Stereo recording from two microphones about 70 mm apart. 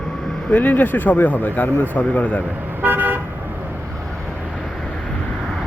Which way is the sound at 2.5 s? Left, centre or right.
Right.